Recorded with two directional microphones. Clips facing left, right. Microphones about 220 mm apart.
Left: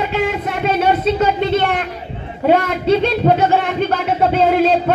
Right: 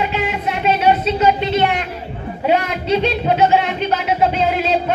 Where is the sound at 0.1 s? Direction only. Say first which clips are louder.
Left 2 dB; 50° left (ahead or behind).